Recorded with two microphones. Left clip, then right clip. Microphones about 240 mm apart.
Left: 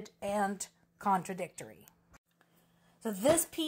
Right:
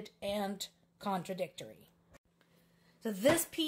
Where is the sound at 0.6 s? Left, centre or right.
Left.